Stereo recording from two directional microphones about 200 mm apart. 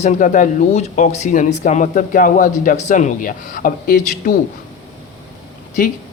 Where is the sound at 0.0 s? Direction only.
40° left (ahead or behind).